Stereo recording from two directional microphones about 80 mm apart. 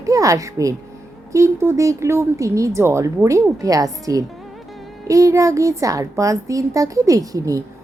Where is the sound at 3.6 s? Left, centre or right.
Right.